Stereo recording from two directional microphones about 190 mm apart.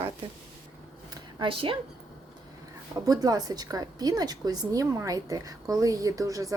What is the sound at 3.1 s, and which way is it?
A woman's voice, 20° right (ahead or behind).